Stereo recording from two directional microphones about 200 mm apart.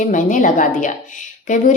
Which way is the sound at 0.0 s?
40° left (ahead or behind).